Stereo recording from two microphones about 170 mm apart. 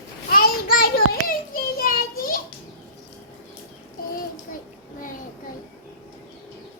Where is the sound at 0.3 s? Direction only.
60° left (ahead or behind).